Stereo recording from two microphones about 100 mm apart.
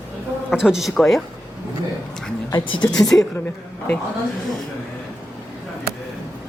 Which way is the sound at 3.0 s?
5° left (ahead or behind).